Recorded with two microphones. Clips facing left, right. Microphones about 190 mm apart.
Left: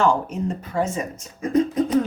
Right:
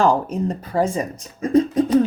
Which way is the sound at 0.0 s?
35° right (ahead or behind).